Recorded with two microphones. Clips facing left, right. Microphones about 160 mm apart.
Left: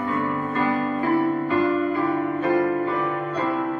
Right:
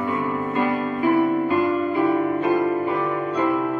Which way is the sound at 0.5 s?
20° right (ahead or behind).